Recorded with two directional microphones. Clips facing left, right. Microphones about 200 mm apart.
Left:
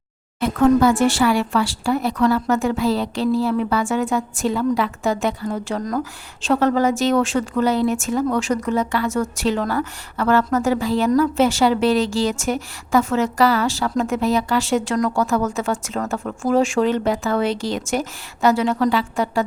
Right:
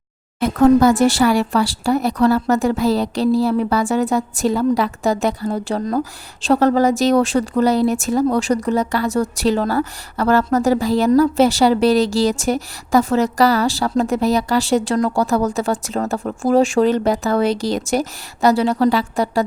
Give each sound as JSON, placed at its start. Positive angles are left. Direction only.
{"t": 0.3, "sound": "speech", "side_deg": -40}